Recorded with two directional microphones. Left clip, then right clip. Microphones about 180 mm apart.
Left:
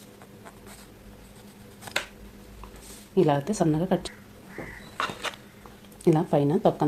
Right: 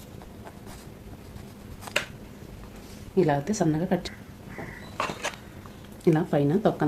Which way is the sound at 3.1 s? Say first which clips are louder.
Left 1 dB; 25° left (ahead or behind).